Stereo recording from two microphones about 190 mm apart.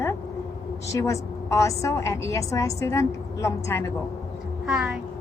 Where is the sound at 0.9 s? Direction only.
15° left (ahead or behind).